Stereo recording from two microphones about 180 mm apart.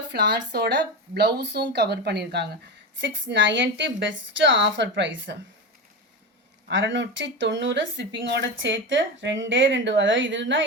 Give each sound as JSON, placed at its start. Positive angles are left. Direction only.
{"t": 0.1, "sound": "speech", "side_deg": -65}
{"t": 3.0, "sound": "a woman's voice", "side_deg": -90}
{"t": 6.7, "sound": "a woman's voice", "side_deg": -90}